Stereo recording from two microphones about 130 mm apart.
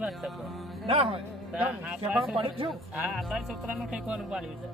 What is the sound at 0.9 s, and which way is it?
Speech, 45° right (ahead or behind).